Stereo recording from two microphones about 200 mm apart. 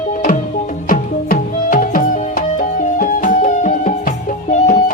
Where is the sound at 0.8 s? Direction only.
45° left (ahead or behind).